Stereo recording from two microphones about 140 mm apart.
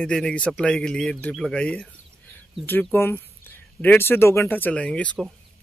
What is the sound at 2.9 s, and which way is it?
Speech, 15° left (ahead or behind).